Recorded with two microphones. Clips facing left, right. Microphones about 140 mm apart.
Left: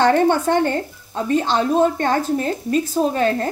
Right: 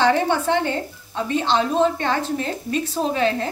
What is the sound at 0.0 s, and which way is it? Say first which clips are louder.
A woman's voice: left 3 dB; 50° left (ahead or behind).